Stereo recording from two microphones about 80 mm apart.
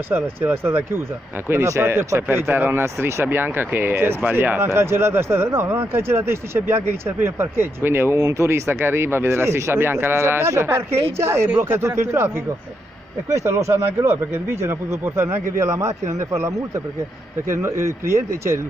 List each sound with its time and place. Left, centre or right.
0.1 s speech: right
13.3 s speech: right